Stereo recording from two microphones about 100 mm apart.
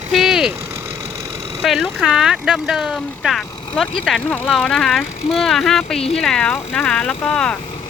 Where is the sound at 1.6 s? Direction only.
Centre (ahead or behind).